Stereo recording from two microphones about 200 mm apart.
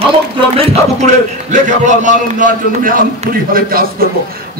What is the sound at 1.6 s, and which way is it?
A man's voice, 40° right (ahead or behind).